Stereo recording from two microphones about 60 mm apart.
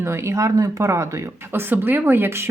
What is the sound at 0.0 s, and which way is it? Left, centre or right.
Speech, right.